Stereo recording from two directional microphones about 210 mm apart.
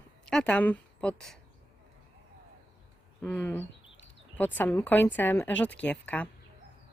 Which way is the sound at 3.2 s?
10° left (ahead or behind).